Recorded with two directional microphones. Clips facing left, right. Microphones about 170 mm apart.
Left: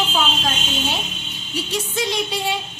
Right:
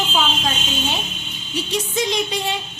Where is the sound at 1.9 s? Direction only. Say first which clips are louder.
Right 2 dB; 5° left (ahead or behind).